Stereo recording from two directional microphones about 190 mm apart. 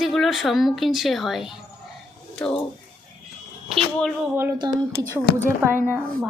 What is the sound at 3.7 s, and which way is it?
Speech, centre (ahead or behind).